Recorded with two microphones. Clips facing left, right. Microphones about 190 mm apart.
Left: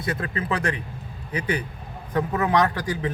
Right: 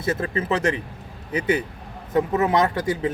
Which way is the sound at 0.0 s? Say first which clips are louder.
Right 4 dB; 25° right (ahead or behind).